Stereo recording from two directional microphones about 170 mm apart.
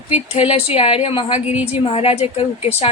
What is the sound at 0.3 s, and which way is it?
A woman's voice, 35° left (ahead or behind).